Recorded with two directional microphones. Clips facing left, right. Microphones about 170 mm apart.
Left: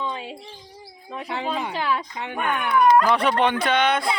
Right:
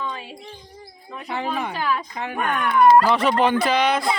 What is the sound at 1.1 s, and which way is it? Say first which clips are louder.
Speech: right 1 dB; 20° left (ahead or behind).